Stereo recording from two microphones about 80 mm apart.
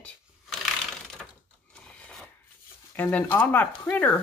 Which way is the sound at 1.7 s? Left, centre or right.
Centre.